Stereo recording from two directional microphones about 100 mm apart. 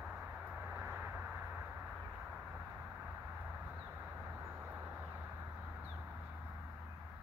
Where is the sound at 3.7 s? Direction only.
15° right (ahead or behind).